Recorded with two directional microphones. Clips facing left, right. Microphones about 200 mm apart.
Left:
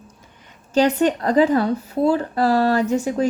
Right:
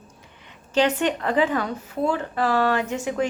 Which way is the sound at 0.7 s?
40° left (ahead or behind).